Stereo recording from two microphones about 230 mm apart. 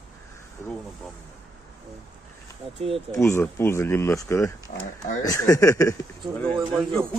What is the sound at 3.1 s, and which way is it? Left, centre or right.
Speech, centre.